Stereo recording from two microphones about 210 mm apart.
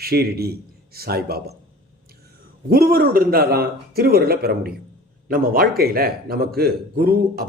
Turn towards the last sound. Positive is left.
turn(degrees=-45)  # may be behind; listen again after turning